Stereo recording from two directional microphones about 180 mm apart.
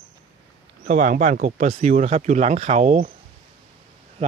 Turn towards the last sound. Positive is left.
turn(degrees=-35)  # may be behind; listen again after turning